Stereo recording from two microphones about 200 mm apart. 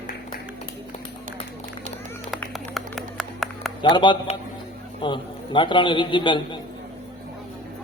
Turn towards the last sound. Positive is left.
turn(degrees=25)  # may be behind; listen again after turning